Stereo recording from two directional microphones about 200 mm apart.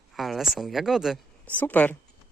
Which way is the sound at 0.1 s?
Centre (ahead or behind).